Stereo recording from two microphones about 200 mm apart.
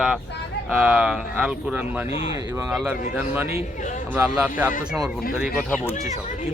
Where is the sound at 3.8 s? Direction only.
40° left (ahead or behind).